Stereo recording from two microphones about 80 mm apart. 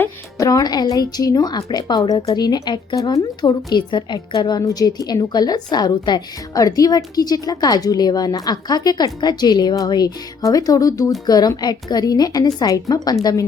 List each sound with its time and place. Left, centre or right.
0.3 s a woman's voice: left
6.5 s a woman's voice: left